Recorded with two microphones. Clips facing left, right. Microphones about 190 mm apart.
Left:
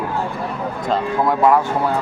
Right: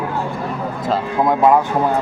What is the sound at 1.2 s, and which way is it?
Speech, 20° right (ahead or behind).